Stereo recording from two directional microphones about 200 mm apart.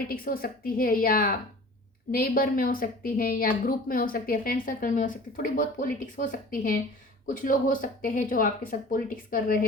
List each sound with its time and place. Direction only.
0.1 s a woman's voice: 45° left (ahead or behind)